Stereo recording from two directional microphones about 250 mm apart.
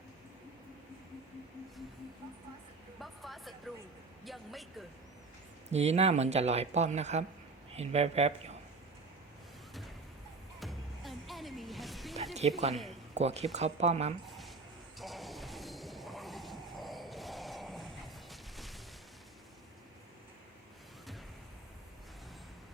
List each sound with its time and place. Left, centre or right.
3.0 s speech: centre
5.7 s speech: right
10.6 s music: centre
12.3 s speech: right
12.7 s speech: centre
13.1 s speech: right
14.3 s a sound: centre